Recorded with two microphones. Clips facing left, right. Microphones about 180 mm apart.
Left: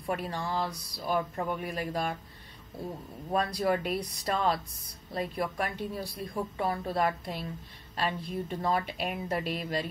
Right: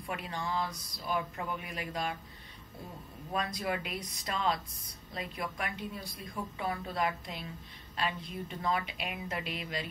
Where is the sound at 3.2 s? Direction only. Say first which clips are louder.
Left 6 dB; 35° left (ahead or behind).